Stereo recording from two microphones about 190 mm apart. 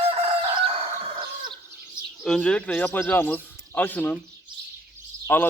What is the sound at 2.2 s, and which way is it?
A man's voice, 5° left (ahead or behind).